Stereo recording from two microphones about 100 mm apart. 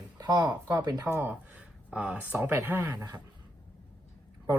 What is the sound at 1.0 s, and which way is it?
Speech, 20° right (ahead or behind).